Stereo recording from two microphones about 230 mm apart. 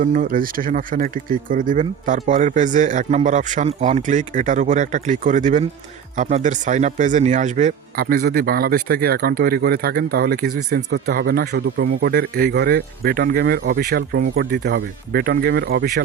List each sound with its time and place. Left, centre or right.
0.0 s speech: right